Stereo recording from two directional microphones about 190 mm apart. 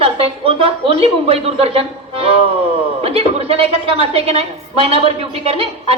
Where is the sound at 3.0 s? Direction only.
30° right (ahead or behind).